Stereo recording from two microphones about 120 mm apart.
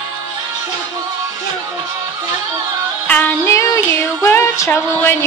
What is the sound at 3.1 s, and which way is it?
Child singing, 10° left (ahead or behind).